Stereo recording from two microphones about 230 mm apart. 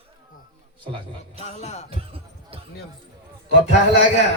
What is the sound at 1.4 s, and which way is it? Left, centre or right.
Music, left.